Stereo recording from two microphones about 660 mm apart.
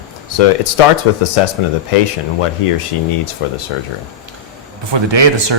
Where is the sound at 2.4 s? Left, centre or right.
Left.